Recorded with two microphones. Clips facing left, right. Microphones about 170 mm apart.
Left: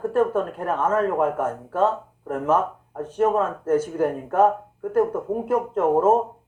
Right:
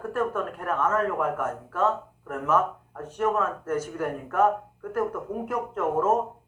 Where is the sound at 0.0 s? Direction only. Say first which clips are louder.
Left 7 dB; 30° left (ahead or behind).